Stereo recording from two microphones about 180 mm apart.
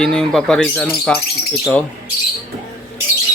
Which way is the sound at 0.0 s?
5° left (ahead or behind).